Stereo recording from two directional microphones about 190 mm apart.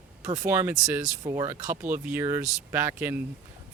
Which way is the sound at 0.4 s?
10° right (ahead or behind).